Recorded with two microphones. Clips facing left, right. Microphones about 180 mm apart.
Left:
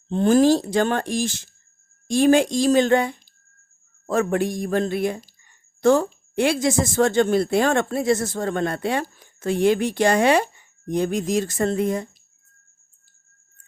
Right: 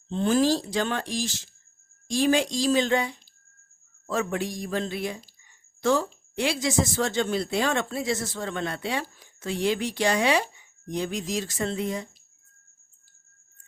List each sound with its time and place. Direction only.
0.1 s speech: 45° left (ahead or behind)